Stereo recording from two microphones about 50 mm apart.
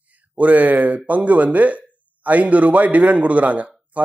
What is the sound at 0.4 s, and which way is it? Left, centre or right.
Speech, right.